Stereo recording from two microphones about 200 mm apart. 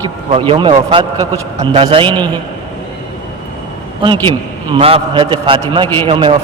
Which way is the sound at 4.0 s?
25° right (ahead or behind).